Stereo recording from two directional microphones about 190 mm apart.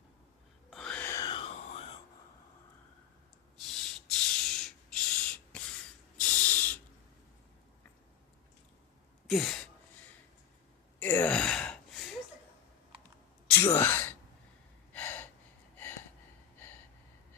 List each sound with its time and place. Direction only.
0.7 s a sound: 5° left (ahead or behind); by 1.9 s 30° left (ahead or behind)
3.7 s a sound: 5° left (ahead or behind)
9.2 s sigh: centre (ahead or behind)
11.0 s gasp: 10° left (ahead or behind)
13.7 s sigh: 10° left (ahead or behind)
14.9 s gasp: 10° left (ahead or behind)